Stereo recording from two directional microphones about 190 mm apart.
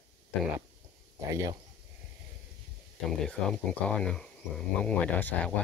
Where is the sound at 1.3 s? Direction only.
15° right (ahead or behind).